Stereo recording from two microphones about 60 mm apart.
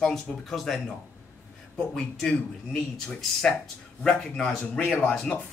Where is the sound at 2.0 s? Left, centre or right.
Centre.